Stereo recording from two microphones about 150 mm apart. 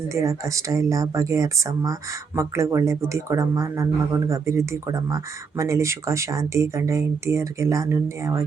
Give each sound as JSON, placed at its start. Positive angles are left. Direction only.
{"t": 0.1, "sound": "speech", "side_deg": -20}